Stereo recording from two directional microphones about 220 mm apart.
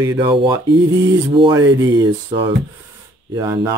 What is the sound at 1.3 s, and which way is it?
Speech, 20° right (ahead or behind).